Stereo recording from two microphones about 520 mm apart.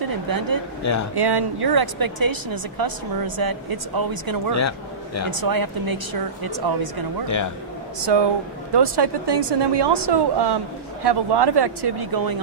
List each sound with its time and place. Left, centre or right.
0.3 s speech: right
0.8 s speech: left
1.1 s a woman's voice: right
8.0 s a woman's voice: right